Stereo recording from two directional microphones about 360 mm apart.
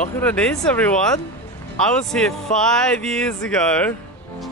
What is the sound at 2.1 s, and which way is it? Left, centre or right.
Speech, centre.